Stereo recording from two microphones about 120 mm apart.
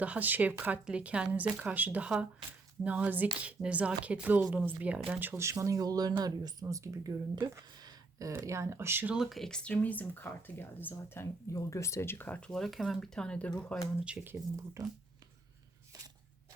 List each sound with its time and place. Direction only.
0.0 s speech: 15° right (ahead or behind)
5.4 s speech: 25° right (ahead or behind)
7.8 s a sound: 35° right (ahead or behind)
8.3 s speech: 20° right (ahead or behind)
9.1 s speech: centre (ahead or behind)
14.0 s speech: 10° right (ahead or behind)
14.5 s speech: 25° right (ahead or behind)